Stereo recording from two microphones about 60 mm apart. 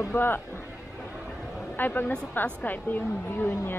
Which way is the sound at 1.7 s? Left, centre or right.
Left.